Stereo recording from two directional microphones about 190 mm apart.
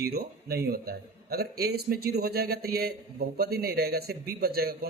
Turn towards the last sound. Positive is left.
turn(degrees=-55)  # may be behind; listen again after turning